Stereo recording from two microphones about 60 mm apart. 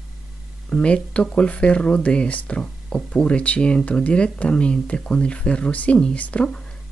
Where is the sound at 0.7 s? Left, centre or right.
Left.